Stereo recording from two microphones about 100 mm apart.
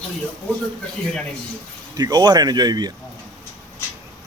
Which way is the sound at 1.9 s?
40° right (ahead or behind).